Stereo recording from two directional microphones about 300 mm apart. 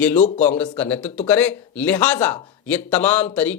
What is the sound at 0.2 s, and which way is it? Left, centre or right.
Speech, left.